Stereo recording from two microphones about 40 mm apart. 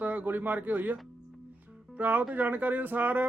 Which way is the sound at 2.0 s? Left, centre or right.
Right.